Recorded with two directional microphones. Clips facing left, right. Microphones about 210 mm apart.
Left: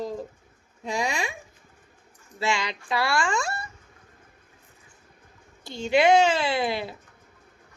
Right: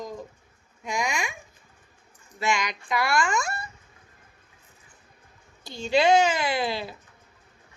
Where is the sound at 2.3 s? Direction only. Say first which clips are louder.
Even; 30° left (ahead or behind).